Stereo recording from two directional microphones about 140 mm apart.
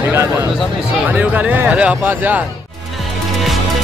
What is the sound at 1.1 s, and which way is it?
Speech, 10° right (ahead or behind).